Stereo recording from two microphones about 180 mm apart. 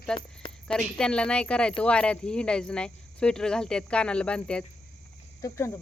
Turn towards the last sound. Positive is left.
turn(degrees=15)  # may be behind; listen again after turning